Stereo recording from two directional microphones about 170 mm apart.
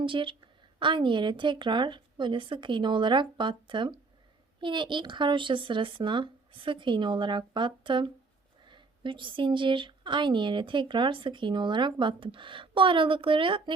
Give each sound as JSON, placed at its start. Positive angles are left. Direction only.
{"t": 0.0, "sound": "speech", "side_deg": -30}